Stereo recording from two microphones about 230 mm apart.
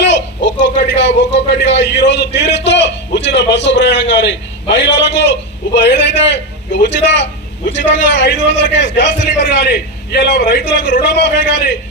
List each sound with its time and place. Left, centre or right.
0.0 s a man's voice: left